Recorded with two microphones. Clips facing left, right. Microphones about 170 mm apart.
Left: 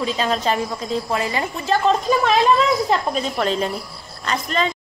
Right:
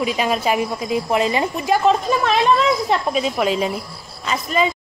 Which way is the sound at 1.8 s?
Centre (ahead or behind).